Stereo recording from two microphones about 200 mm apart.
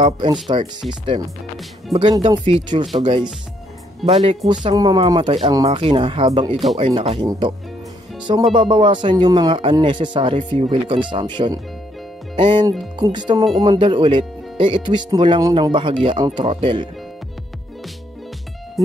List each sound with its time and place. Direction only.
0.0 s speech: 25° right (ahead or behind)
1.9 s speech: centre (ahead or behind)
2.2 s speech: 25° right (ahead or behind)
6.5 s speech: centre (ahead or behind)
6.8 s speech: 25° right (ahead or behind)
8.5 s speech: 25° right (ahead or behind)